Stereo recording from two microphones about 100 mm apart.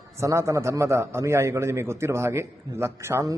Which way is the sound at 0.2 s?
30° right (ahead or behind).